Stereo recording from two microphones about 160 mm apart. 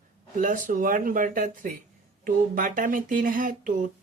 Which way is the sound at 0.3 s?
55° right (ahead or behind).